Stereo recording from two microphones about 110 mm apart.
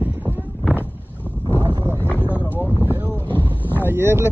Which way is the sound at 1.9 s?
20° left (ahead or behind).